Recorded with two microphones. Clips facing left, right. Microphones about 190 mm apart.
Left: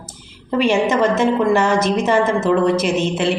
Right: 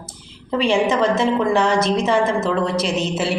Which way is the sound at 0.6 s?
30° right (ahead or behind).